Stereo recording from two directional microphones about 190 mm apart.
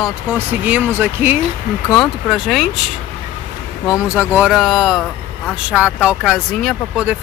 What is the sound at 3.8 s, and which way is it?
Speech, 5° right (ahead or behind).